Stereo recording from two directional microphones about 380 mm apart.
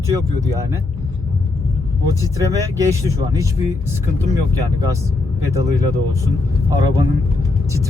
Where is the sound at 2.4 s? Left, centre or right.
Centre.